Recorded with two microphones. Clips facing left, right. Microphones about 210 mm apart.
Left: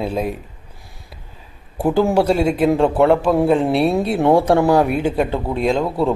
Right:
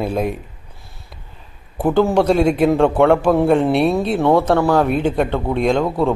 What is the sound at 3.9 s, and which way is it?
Speech, 15° left (ahead or behind).